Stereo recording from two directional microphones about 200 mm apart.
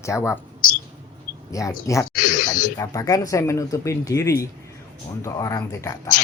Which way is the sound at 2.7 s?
15° left (ahead or behind).